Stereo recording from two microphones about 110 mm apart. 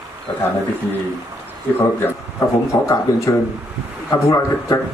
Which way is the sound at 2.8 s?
30° left (ahead or behind).